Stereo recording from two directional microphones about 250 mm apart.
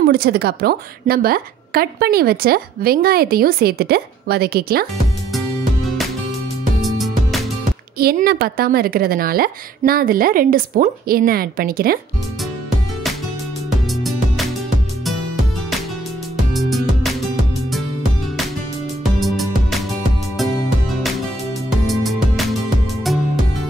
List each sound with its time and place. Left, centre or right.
0.0 s a woman's voice: right
5.3 s music: centre
8.0 s a woman's voice: right
13.7 s music: centre
16.7 s music: centre
19.1 s music: centre
21.6 s music: centre